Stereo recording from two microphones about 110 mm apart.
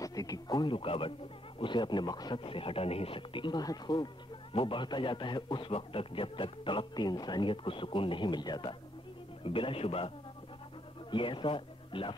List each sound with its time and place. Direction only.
0.0 s a man's voice: 35° left (ahead or behind)
2.4 s a man's voice: 55° left (ahead or behind); by 4.1 s 40° left (ahead or behind)
4.6 s a man's voice: 50° left (ahead or behind)
9.4 s speech: 55° left (ahead or behind)